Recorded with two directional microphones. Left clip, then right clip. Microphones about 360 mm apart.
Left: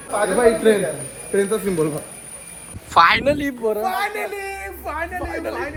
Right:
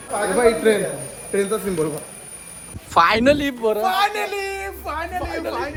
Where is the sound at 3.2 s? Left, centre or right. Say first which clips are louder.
Right 3 dB; right.